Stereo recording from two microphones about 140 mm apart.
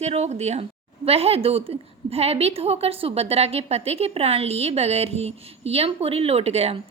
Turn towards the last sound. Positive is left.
turn(degrees=-50)  # may be behind; listen again after turning